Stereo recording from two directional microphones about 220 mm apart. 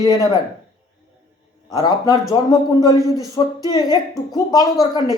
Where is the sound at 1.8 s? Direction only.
20° left (ahead or behind).